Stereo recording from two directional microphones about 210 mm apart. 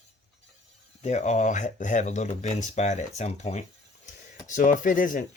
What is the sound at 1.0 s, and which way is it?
Speech, 35° left (ahead or behind).